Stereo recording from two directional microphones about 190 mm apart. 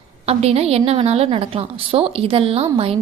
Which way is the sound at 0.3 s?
35° right (ahead or behind).